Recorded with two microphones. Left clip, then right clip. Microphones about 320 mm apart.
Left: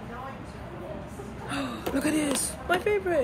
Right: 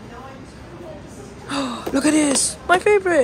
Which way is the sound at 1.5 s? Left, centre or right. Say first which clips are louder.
Right 8 dB; centre.